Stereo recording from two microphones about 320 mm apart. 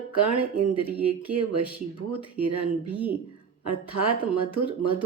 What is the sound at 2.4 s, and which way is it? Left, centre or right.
Speech, right.